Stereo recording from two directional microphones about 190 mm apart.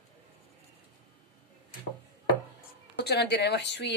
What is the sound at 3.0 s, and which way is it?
Speech, 60° left (ahead or behind).